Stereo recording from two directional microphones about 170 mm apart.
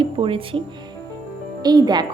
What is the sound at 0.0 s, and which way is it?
Speech, 30° right (ahead or behind).